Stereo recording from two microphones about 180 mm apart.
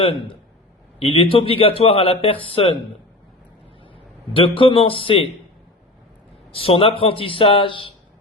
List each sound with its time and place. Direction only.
0.9 s a man's voice: 30° left (ahead or behind)
3.9 s a man's voice: 30° left (ahead or behind)
6.5 s a man's voice: 30° left (ahead or behind)